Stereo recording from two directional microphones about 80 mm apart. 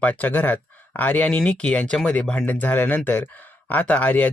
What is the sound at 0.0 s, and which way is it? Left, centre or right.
Speech, left.